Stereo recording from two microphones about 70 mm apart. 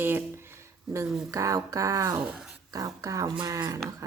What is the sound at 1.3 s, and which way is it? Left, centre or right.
Speech, right.